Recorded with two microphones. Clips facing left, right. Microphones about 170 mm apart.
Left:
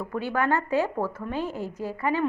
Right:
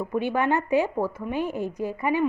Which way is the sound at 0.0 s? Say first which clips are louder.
Right 2 dB; 20° right (ahead or behind).